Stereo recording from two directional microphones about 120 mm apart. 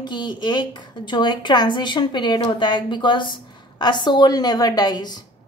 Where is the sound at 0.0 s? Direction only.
40° left (ahead or behind).